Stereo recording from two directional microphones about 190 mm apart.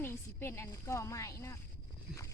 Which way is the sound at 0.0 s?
10° left (ahead or behind).